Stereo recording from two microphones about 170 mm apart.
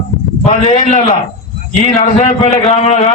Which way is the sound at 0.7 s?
40° left (ahead or behind).